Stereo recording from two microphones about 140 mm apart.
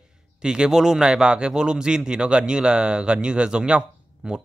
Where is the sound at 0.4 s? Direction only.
5° right (ahead or behind).